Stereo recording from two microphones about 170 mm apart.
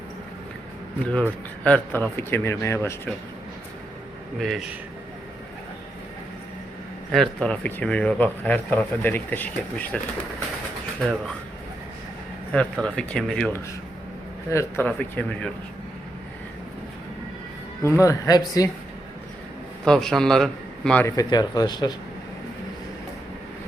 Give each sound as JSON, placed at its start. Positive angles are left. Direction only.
{"t": 1.6, "sound": "speech", "side_deg": 10}
{"t": 4.4, "sound": "a man's voice", "side_deg": 0}
{"t": 7.1, "sound": "speech", "side_deg": 5}
{"t": 12.5, "sound": "a man's voice", "side_deg": 5}
{"t": 17.8, "sound": "speech", "side_deg": 15}
{"t": 19.8, "sound": "a man's voice", "side_deg": 5}
{"t": 21.2, "sound": "speech", "side_deg": 25}